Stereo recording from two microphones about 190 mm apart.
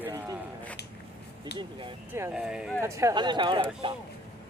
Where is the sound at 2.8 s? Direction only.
15° right (ahead or behind).